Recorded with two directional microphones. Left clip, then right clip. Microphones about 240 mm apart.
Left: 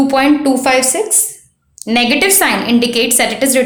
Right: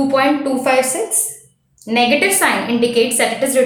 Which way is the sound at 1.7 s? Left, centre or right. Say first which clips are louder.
Left 1 dB; left.